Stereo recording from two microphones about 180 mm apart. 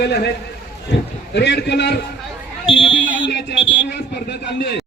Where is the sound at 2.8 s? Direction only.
90° left.